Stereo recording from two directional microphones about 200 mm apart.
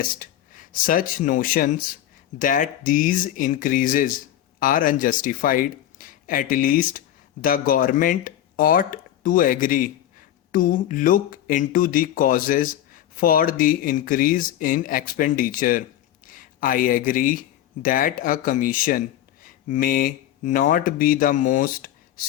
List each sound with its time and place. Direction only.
0.0 s speech: 45° left (ahead or behind)